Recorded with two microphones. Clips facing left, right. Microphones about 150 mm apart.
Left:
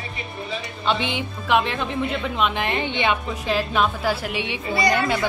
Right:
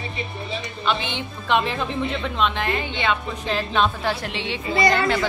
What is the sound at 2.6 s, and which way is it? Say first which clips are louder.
Speech: left 1 dB; 20° left (ahead or behind).